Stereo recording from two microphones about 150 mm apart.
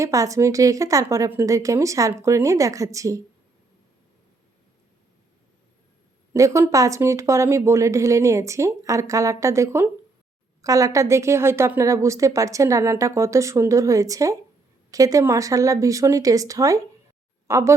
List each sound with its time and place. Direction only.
0.0 s a woman's voice: 20° right (ahead or behind)
6.3 s a woman's voice: 20° right (ahead or behind)